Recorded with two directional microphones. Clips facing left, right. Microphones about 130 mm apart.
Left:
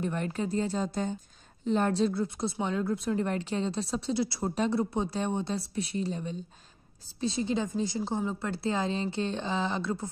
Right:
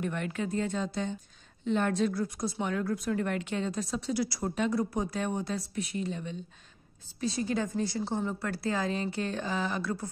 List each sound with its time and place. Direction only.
0.0 s a woman's voice: 35° left (ahead or behind)
7.2 s a woman's voice: 25° left (ahead or behind)